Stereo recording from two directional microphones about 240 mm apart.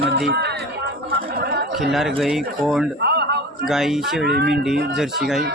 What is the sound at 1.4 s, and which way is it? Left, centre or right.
Chatter, right.